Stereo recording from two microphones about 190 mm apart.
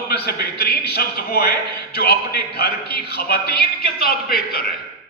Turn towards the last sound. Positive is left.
turn(degrees=55)  # may be behind; listen again after turning